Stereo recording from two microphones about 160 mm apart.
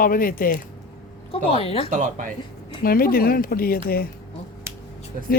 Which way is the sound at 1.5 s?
35° left (ahead or behind).